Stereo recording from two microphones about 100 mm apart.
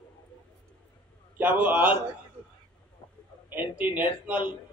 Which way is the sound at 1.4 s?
15° right (ahead or behind).